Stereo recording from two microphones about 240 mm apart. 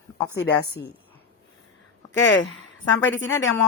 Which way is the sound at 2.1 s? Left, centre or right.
Left.